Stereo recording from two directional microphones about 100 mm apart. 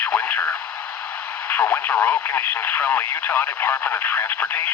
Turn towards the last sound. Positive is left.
turn(degrees=15)  # may be behind; listen again after turning